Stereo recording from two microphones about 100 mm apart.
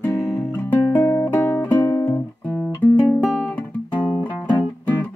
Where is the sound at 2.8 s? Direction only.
20° left (ahead or behind).